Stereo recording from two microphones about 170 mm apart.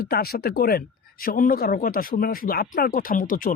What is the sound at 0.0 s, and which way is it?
Speech, 65° left (ahead or behind).